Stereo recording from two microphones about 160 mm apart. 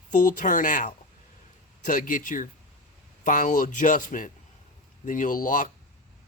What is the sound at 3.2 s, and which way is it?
Speech, 55° left (ahead or behind).